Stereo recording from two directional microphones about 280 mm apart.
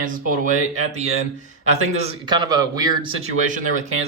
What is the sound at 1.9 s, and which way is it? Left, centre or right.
A man's voice, centre.